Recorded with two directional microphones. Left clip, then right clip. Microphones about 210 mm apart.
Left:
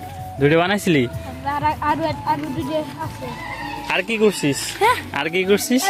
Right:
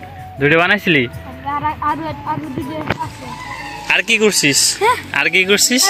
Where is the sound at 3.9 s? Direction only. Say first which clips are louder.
Right 5 dB; centre (ahead or behind).